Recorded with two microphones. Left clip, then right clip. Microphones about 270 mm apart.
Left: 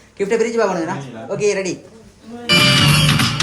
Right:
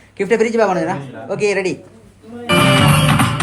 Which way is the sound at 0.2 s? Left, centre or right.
Right.